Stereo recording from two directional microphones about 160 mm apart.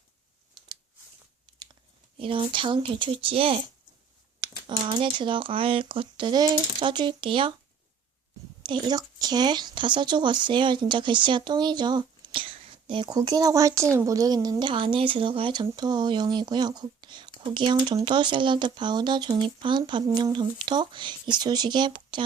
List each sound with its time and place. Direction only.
2.1 s speech: 35° right (ahead or behind)
8.6 s speech: 25° right (ahead or behind)